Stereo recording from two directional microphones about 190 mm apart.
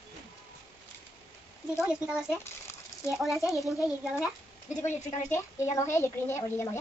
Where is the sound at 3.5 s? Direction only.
Centre (ahead or behind).